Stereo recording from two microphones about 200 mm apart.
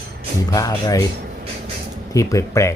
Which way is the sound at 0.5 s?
15° left (ahead or behind).